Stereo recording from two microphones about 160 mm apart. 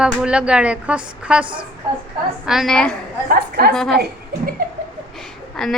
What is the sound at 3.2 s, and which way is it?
A woman's voice, 85° right.